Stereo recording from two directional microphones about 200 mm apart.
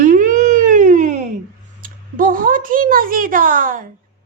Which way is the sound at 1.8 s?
45° right (ahead or behind).